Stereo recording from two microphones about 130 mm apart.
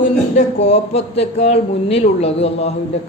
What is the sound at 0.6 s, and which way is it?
Speech, 50° left (ahead or behind).